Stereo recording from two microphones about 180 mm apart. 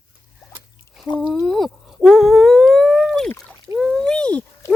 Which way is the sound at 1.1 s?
25° left (ahead or behind).